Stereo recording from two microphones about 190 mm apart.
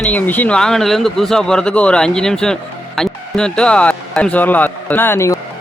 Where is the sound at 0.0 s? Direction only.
10° left (ahead or behind).